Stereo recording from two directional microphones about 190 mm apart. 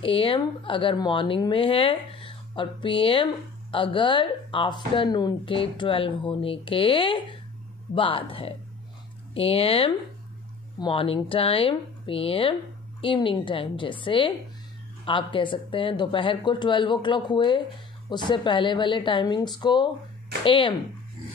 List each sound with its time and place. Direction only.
0.0 s speech: 30° left (ahead or behind)